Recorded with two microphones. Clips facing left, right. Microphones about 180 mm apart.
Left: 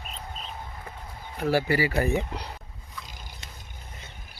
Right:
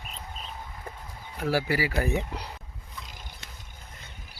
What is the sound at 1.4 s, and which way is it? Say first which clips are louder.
Speech: left 3 dB; 5° right (ahead or behind).